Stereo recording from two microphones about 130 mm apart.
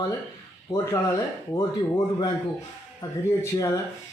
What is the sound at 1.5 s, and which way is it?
Speech, 30° left (ahead or behind).